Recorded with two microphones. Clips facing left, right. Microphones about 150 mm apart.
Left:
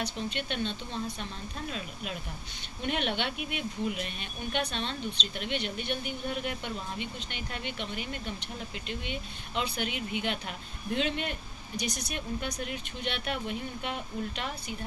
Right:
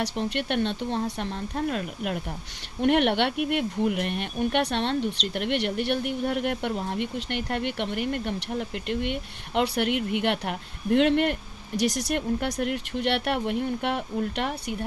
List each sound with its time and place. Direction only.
0.0 s speech: 70° right (ahead or behind)